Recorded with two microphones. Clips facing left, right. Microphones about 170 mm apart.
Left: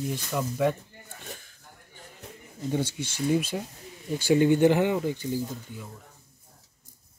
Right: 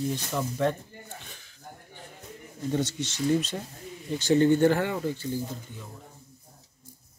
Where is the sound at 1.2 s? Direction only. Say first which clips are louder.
Left 7 dB; 45° left (ahead or behind).